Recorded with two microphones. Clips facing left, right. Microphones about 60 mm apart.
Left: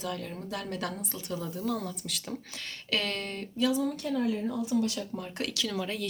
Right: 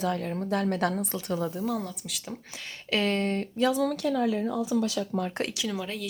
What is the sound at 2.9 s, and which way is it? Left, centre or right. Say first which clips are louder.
Speech: right 6 dB; right.